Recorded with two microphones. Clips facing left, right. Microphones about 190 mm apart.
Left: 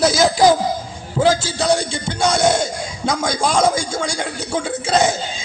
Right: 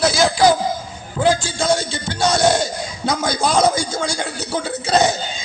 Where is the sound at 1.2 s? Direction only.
20° left (ahead or behind).